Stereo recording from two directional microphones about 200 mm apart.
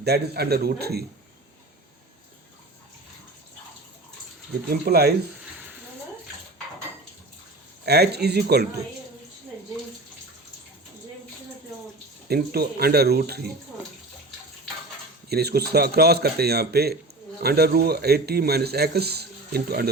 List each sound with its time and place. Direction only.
0.0 s a man's voice: 55° right (ahead or behind)
4.7 s a man's voice: 50° right (ahead or behind)
7.9 s a man's voice: 55° right (ahead or behind)
12.3 s a man's voice: 50° right (ahead or behind)
15.3 s a man's voice: 55° right (ahead or behind)